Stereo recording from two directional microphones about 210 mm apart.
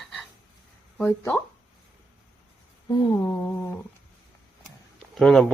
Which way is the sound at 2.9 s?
20° left (ahead or behind).